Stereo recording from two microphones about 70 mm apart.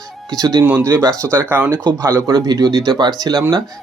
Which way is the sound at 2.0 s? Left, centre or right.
Right.